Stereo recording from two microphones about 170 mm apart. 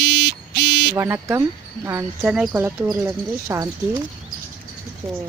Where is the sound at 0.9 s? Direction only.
15° right (ahead or behind).